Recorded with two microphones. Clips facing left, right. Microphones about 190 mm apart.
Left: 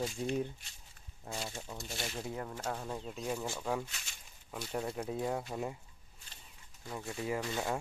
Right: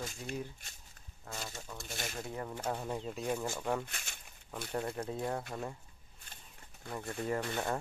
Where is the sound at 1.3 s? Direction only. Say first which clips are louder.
Left 3 dB; 20° left (ahead or behind).